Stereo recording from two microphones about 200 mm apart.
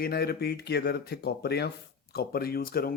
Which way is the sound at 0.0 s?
50° left (ahead or behind).